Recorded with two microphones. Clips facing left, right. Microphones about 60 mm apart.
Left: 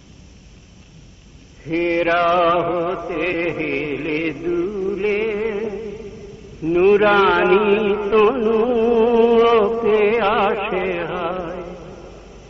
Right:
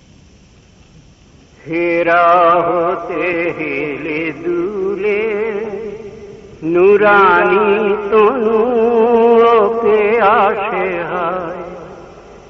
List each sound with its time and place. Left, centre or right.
1.7 s music: right
6.6 s a sound: right
7.0 s music: right